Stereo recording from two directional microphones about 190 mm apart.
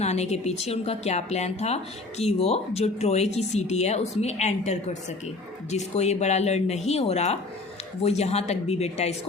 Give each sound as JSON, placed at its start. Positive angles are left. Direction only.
{"t": 0.0, "sound": "speech", "side_deg": 35}